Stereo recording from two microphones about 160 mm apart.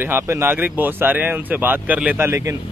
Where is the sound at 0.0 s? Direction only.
15° right (ahead or behind).